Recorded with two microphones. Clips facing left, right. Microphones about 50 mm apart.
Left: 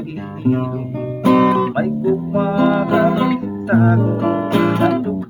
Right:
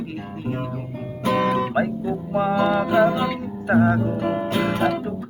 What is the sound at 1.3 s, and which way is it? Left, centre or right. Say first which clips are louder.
Guitar: left 7 dB; centre.